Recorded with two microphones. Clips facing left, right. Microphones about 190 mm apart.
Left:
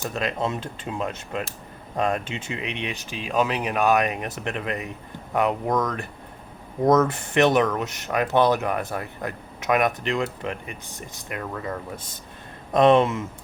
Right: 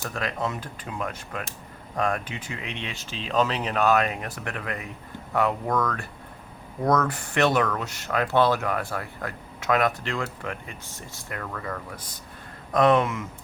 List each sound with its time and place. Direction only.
0.0 s speech: 20° left (ahead or behind)